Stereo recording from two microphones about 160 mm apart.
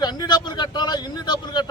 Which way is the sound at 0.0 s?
25° left (ahead or behind).